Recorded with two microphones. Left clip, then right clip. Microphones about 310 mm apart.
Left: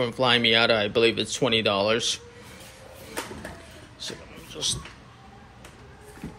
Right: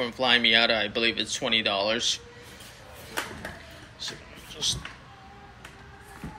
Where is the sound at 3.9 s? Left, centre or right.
Centre.